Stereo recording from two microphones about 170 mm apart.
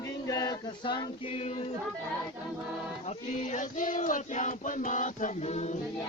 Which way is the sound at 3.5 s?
45° left (ahead or behind).